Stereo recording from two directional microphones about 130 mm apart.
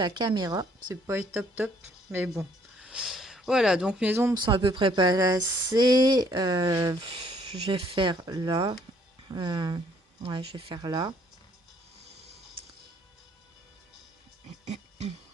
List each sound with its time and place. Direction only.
0.0 s speech: 35° right (ahead or behind); by 1.7 s 15° right (ahead or behind)
2.3 s speech: 5° right (ahead or behind)
4.4 s speech: 40° right (ahead or behind)
7.7 s speech: 40° right (ahead or behind)
14.6 s a sound: 60° right (ahead or behind)